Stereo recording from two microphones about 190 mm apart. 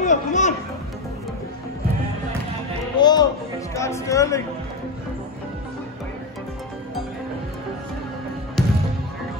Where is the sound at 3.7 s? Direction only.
15° left (ahead or behind).